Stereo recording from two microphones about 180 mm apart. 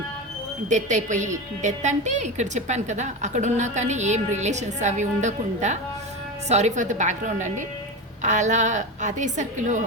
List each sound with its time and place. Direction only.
0.7 s a woman's voice: 45° right (ahead or behind)